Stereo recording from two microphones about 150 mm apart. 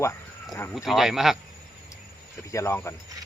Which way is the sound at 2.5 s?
20° left (ahead or behind).